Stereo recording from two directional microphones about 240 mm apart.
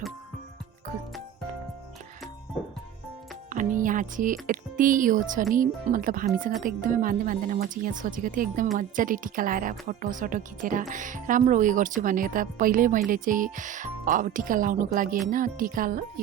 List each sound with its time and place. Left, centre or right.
3.5 s speech: right